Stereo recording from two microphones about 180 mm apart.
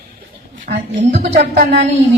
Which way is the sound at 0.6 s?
40° right (ahead or behind).